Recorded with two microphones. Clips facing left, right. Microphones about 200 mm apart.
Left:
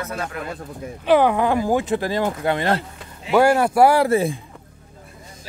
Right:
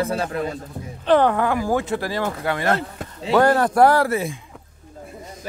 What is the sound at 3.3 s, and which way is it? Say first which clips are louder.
Speech: left 1 dB; 10° left (ahead or behind).